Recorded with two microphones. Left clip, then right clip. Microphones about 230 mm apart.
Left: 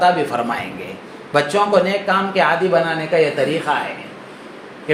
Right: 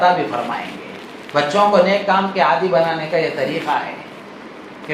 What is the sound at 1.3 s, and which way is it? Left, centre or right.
Speech, left.